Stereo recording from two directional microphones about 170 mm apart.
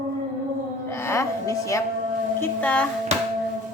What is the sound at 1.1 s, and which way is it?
Music, 20° left (ahead or behind).